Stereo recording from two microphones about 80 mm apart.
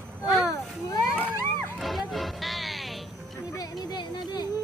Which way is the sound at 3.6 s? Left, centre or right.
Left.